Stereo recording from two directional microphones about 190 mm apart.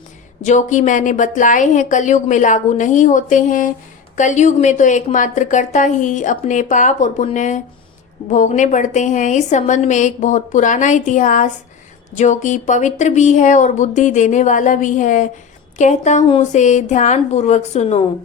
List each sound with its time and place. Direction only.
0.4 s speech: 40° left (ahead or behind)